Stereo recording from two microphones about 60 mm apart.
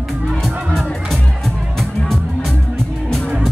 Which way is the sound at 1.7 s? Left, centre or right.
Centre.